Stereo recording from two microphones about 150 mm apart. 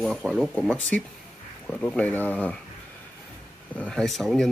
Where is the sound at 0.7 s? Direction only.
10° left (ahead or behind).